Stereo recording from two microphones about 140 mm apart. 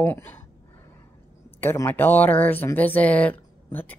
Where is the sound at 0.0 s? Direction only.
15° left (ahead or behind).